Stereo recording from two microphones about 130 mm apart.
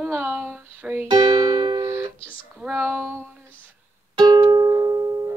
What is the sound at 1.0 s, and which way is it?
Music, 35° right (ahead or behind).